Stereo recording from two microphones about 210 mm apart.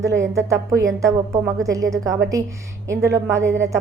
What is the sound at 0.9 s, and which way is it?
A woman's voice, 15° right (ahead or behind).